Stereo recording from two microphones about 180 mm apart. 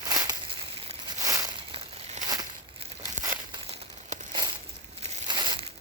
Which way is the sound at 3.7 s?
40° right (ahead or behind).